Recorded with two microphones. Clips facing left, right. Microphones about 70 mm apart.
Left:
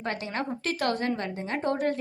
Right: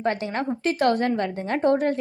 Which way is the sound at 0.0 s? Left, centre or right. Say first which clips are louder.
Right 6 dB; right.